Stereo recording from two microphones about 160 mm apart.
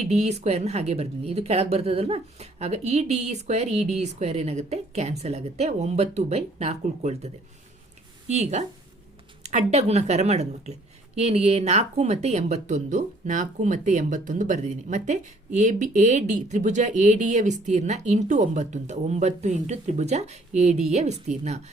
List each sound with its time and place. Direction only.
0.0 s a woman's voice: 45° right (ahead or behind)
8.3 s a woman's voice: 45° right (ahead or behind)